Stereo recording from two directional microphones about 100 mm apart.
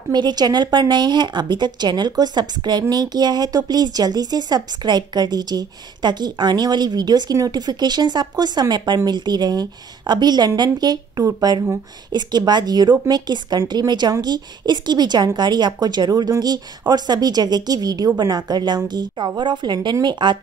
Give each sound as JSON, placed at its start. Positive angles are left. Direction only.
{"t": 0.1, "sound": "speech", "side_deg": -45}